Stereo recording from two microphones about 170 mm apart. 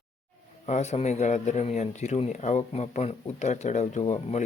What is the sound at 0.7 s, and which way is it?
Speech, 40° left (ahead or behind).